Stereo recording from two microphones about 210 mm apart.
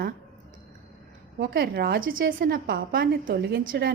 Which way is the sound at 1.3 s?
50° right (ahead or behind).